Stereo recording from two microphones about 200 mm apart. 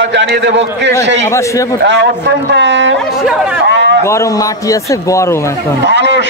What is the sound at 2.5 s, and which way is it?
Speech, 60° right (ahead or behind).